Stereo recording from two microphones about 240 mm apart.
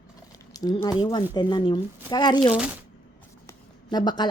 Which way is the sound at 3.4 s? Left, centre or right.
Centre.